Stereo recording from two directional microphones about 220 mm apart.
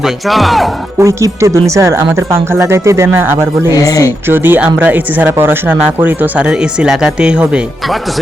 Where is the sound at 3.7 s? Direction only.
15° left (ahead or behind).